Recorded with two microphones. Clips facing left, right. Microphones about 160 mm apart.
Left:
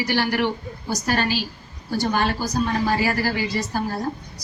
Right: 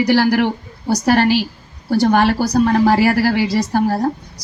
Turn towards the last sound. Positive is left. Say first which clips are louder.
# right 9 dB
turn(degrees=-65)  # may be behind; listen again after turning